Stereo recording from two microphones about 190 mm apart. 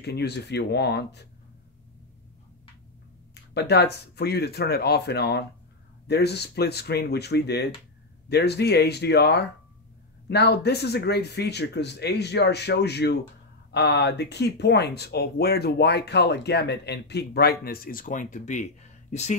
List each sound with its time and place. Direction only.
0.0 s speech: 60° left (ahead or behind)
3.5 s speech: 60° left (ahead or behind); by 19.3 s 40° left (ahead or behind)